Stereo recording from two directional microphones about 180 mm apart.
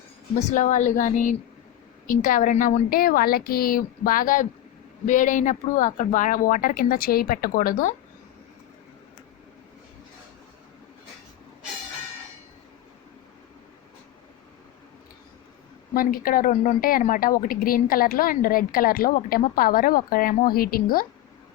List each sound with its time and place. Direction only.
0.3 s a woman's voice: 45° left (ahead or behind)
16.0 s a woman's voice: 55° left (ahead or behind)